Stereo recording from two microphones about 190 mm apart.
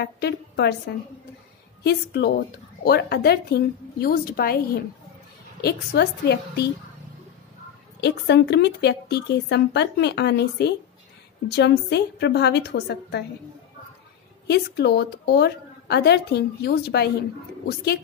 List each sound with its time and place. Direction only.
0.0 s a woman's voice: 60° left (ahead or behind)
1.8 s a woman's voice: 60° left (ahead or behind)
8.0 s a woman's voice: 60° left (ahead or behind)
14.5 s a woman's voice: 60° left (ahead or behind)